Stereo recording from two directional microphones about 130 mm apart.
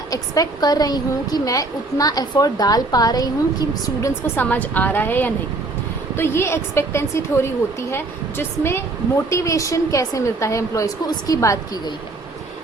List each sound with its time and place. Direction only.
0.1 s a woman's voice: 30° left (ahead or behind)
4.4 s a woman's voice: 15° left (ahead or behind)